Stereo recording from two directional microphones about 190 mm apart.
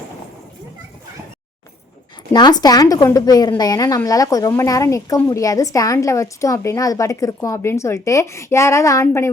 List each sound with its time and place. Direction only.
2.3 s speech: 20° left (ahead or behind)